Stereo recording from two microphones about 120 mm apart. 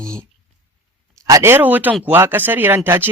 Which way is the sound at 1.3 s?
20° right (ahead or behind).